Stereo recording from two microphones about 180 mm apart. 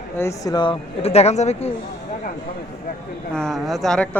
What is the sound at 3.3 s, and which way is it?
Speech, centre (ahead or behind).